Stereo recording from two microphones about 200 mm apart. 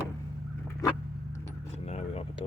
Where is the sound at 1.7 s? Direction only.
30° left (ahead or behind).